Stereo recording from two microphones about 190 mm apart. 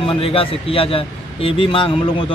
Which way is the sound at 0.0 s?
30° left (ahead or behind).